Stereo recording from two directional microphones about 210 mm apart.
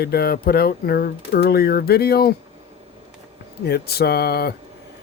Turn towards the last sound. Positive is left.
turn(degrees=50)  # may be behind; listen again after turning